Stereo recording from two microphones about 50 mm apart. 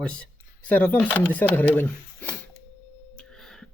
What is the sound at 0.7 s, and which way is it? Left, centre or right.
Speech, left.